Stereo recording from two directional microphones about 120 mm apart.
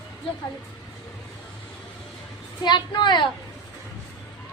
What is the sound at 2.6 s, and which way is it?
Speech, 40° left (ahead or behind).